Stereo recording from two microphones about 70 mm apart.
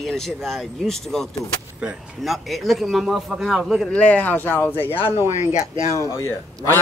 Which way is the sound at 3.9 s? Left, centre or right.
Centre.